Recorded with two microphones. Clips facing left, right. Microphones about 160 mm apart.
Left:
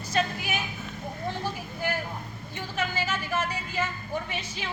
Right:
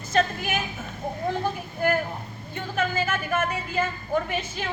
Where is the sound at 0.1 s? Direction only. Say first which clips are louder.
Right 4 dB; 50° right (ahead or behind).